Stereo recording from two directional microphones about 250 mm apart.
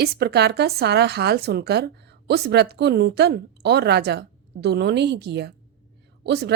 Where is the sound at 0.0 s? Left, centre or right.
Right.